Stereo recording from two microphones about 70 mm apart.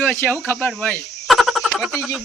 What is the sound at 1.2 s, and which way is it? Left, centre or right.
Frog, centre.